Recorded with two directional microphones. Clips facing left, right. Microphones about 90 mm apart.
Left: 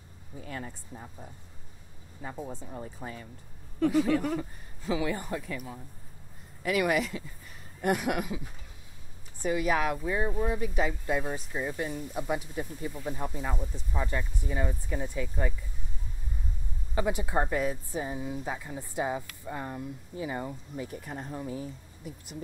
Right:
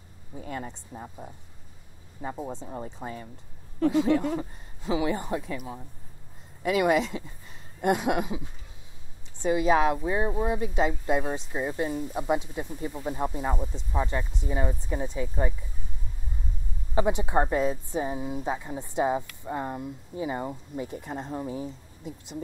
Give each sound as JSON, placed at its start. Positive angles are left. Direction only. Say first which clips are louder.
{"t": 0.5, "sound": "speech", "louder": "right 4 dB", "side_deg": -25}
{"t": 6.6, "sound": "speech", "louder": "right 4 dB", "side_deg": -25}
{"t": 16.9, "sound": "speech", "louder": "right 4 dB", "side_deg": -25}